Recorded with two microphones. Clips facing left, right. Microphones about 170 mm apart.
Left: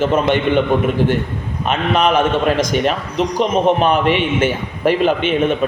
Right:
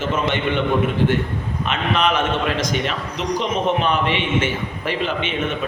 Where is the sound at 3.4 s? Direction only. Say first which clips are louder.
Left 6 dB; 45° left (ahead or behind).